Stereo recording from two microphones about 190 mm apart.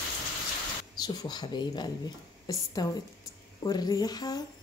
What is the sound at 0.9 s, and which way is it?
Speech, 20° left (ahead or behind).